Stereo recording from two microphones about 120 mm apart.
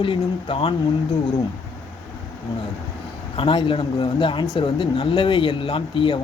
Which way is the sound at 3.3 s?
45° left (ahead or behind).